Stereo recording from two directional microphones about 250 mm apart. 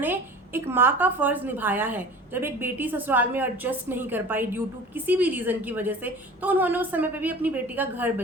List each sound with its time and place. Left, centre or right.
0.0 s a woman's voice: centre